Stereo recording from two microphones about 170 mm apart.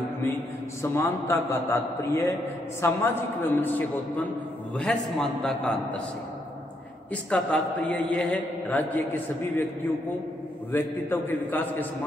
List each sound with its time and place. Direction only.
0.8 s a man's voice: 15° left (ahead or behind)
7.1 s a man's voice: 5° left (ahead or behind)
10.7 s a man's voice: 10° left (ahead or behind)